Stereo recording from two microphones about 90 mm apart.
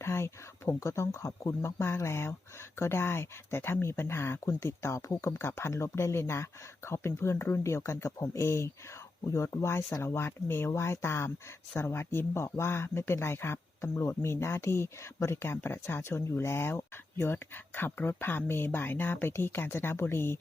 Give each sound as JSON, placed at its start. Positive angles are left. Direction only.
{"t": 0.0, "sound": "speech", "side_deg": 30}